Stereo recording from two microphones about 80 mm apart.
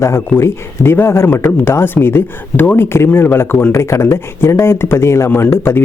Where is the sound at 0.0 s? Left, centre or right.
Left.